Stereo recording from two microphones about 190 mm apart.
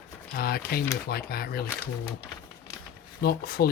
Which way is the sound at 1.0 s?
55° left (ahead or behind).